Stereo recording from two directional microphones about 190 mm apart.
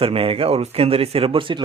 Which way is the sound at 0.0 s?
30° right (ahead or behind).